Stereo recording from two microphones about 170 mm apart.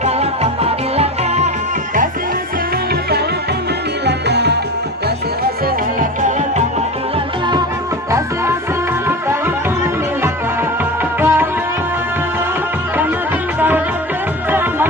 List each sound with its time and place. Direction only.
0.0 s music: 35° right (ahead or behind)
4.0 s music: 80° right
11.1 s music: 10° right (ahead or behind)